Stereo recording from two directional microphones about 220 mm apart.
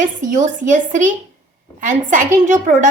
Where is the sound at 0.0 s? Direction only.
35° right (ahead or behind).